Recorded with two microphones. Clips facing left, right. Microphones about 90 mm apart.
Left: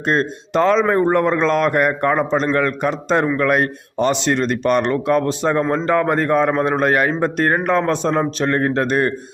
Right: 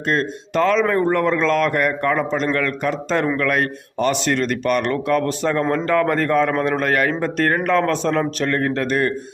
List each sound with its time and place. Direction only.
0.1 s speech: 25° left (ahead or behind)